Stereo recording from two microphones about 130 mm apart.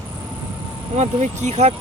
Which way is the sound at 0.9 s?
60° right (ahead or behind).